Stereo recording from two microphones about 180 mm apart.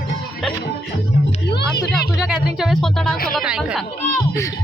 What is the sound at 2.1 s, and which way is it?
Speech, centre (ahead or behind).